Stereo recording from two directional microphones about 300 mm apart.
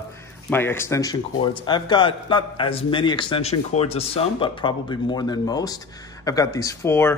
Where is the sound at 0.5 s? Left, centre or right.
Centre.